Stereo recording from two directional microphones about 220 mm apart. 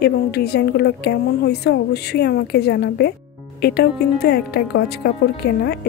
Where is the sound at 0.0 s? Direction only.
45° left (ahead or behind).